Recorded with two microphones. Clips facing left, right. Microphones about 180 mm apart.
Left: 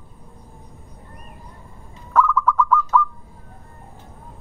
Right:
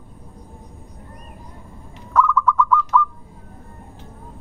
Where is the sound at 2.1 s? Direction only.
5° left (ahead or behind).